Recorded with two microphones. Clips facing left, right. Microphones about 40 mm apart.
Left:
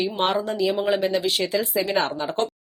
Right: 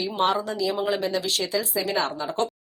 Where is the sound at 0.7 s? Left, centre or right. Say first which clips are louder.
Left 3 dB; centre.